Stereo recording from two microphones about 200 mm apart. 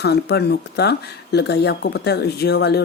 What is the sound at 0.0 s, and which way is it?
Speech, 55° left (ahead or behind).